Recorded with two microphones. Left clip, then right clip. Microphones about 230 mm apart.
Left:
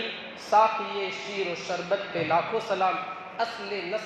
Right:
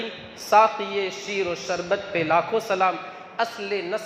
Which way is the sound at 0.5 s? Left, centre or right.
Right.